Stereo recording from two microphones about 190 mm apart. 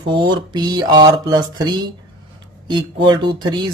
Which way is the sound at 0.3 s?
20° right (ahead or behind).